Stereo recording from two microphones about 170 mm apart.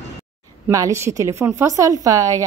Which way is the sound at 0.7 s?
20° right (ahead or behind).